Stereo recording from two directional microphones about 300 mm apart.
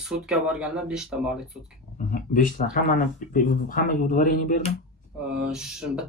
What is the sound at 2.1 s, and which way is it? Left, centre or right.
Speech, left.